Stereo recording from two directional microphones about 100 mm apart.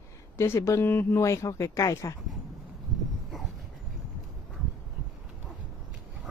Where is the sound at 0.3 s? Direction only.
25° left (ahead or behind).